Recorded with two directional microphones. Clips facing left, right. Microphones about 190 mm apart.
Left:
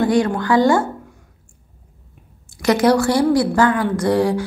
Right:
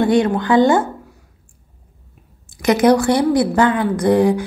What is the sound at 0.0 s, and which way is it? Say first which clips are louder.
Speech: right 2 dB; 25° right (ahead or behind).